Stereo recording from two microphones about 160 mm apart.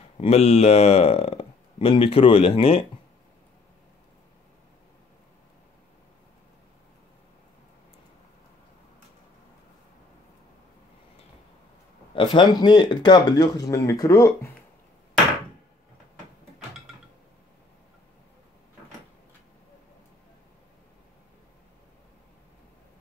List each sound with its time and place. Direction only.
0.2 s speech: 40° left (ahead or behind)
12.1 s speech: 30° left (ahead or behind)